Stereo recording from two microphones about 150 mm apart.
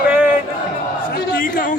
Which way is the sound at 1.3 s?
70° left (ahead or behind).